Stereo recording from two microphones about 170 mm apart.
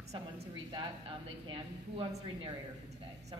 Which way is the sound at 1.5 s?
30° right (ahead or behind).